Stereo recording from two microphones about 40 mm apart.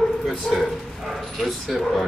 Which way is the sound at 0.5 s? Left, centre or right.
Centre.